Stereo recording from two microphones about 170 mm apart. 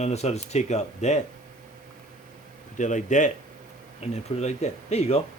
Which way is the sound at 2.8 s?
45° left (ahead or behind).